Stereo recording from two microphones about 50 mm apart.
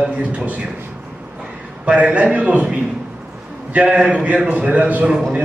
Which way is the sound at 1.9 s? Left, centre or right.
Right.